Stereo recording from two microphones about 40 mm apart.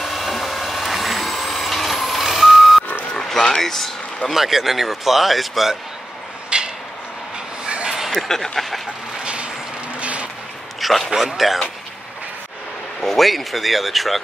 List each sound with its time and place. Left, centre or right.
0.0 s vehicle: centre
3.2 s a sound: centre
3.6 s speech: centre
4.4 s speech: centre
6.5 s a sound: right
8.3 s speech: centre
9.2 s vehicle: right
10.8 s a sound: centre
11.1 s speech: centre
13.0 s speech: centre